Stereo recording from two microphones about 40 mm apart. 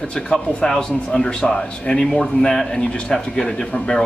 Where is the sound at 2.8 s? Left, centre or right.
Left.